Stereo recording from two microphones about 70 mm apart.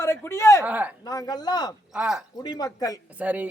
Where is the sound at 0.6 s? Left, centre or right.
Right.